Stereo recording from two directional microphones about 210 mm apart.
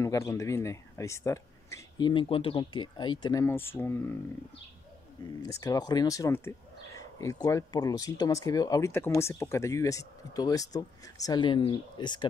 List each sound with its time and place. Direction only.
0.0 s speech: 15° left (ahead or behind)
5.4 s speech: 15° left (ahead or behind)